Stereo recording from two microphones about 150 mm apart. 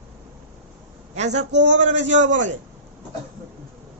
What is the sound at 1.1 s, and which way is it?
A man's voice, 50° right (ahead or behind).